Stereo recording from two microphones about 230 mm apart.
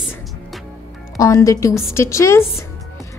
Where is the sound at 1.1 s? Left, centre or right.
Centre.